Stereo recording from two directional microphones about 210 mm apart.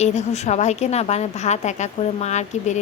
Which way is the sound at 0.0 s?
30° left (ahead or behind).